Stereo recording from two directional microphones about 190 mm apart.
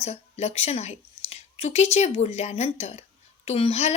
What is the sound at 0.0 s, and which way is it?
A woman's voice, 35° left (ahead or behind).